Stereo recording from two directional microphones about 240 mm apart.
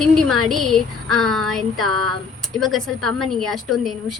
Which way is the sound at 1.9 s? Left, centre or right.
Right.